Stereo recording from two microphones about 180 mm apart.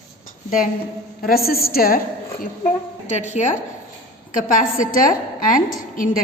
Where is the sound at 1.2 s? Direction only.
55° left (ahead or behind).